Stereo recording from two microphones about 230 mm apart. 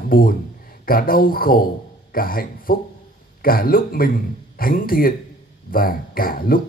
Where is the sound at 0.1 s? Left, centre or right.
Left.